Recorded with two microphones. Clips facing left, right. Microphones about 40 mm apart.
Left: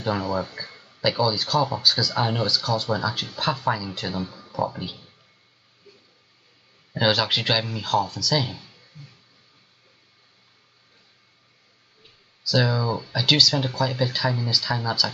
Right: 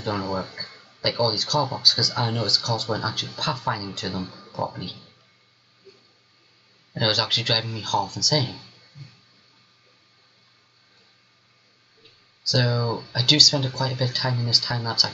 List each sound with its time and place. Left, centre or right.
0.0 s speech: centre
5.9 s a sound: left
6.9 s speech: centre
12.4 s speech: centre